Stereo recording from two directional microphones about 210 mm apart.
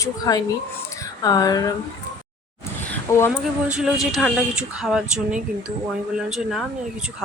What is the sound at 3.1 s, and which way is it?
Speech, 15° left (ahead or behind).